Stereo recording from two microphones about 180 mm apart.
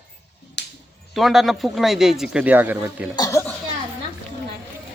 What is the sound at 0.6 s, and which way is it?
Music, 70° left (ahead or behind).